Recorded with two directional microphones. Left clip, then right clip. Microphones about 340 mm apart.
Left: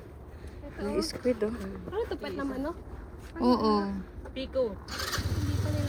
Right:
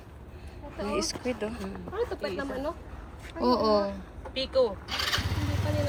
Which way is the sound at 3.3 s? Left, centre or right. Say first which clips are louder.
Right 2 dB; centre.